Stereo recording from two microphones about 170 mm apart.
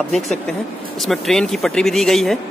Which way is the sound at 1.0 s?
Centre (ahead or behind).